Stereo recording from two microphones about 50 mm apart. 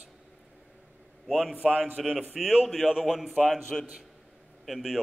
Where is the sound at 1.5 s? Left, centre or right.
Centre.